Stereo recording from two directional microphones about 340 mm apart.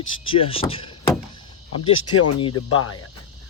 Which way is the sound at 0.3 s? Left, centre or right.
Centre.